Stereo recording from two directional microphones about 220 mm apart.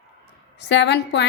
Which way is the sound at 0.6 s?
50° left (ahead or behind).